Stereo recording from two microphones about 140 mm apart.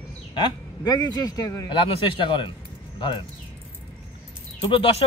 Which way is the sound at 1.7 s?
35° left (ahead or behind).